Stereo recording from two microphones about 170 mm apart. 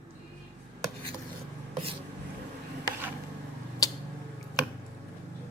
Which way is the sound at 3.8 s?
20° left (ahead or behind).